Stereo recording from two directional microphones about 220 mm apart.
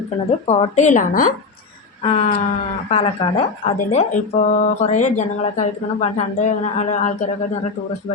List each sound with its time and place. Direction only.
0.4 s speech: 35° left (ahead or behind)
2.0 s wail: 30° left (ahead or behind)
2.9 s speech: 30° left (ahead or behind)